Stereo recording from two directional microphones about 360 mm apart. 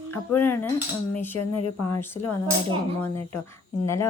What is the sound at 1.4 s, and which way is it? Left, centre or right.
Speech, left.